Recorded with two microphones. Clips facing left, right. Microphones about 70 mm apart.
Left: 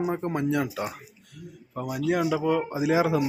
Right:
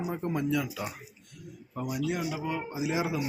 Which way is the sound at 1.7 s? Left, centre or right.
Left.